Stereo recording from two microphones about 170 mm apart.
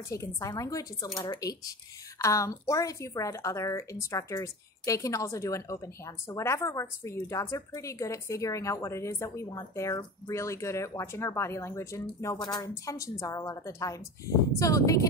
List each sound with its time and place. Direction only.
0.1 s a woman's voice: 20° left (ahead or behind)